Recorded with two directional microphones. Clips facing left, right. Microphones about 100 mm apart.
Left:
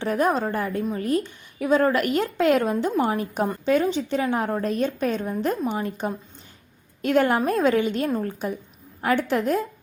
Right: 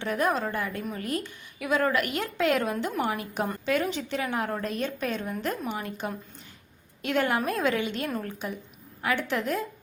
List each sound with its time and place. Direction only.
0.0 s a woman's voice: 35° left (ahead or behind)
7.0 s a woman's voice: 40° left (ahead or behind)